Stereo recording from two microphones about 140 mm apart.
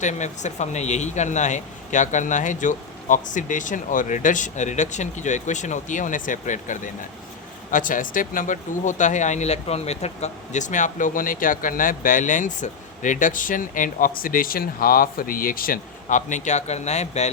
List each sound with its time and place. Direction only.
0.0 s speech: 60° left (ahead or behind)